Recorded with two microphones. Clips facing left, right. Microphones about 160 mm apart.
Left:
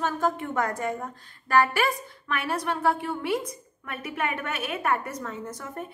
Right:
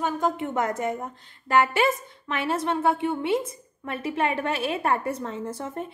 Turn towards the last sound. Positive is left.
turn(degrees=-30)  # may be behind; listen again after turning